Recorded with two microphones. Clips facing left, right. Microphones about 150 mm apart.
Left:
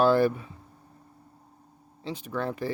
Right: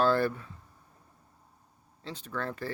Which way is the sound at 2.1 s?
15° left (ahead or behind).